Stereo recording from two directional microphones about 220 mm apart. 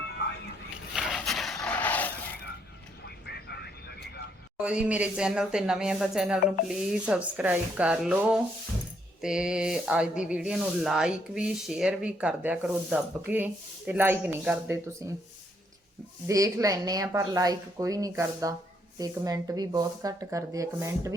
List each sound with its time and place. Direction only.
0.9 s a sound: centre (ahead or behind)
3.0 s vehicle: 50° left (ahead or behind)
4.5 s speech: 5° right (ahead or behind)
16.2 s a woman's voice: 15° right (ahead or behind)